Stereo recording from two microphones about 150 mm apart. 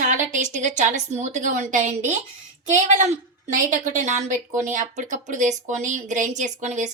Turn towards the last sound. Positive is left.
turn(degrees=-55)  # may be behind; listen again after turning